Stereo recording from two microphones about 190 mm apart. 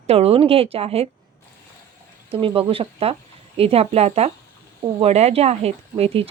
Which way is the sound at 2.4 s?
30° right (ahead or behind).